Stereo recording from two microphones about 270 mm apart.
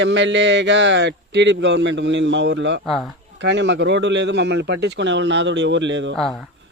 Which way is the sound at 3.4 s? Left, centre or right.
Right.